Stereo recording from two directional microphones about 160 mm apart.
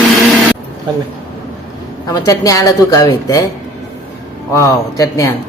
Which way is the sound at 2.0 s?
20° left (ahead or behind).